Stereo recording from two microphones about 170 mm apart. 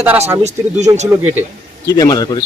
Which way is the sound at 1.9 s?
20° left (ahead or behind).